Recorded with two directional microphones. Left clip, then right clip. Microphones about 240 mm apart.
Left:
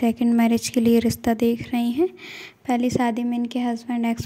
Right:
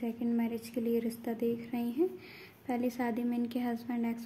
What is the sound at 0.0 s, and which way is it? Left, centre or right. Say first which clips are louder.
A woman's voice: left 14 dB; left.